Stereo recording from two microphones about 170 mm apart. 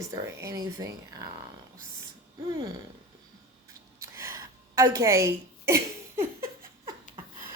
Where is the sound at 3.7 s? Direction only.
15° right (ahead or behind).